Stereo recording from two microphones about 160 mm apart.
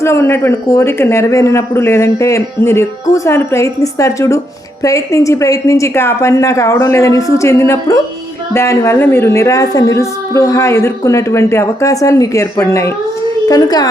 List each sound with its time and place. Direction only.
0.0 s a man's voice: 15° left (ahead or behind)